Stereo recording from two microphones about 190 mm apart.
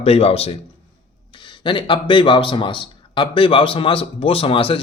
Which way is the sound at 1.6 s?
25° left (ahead or behind).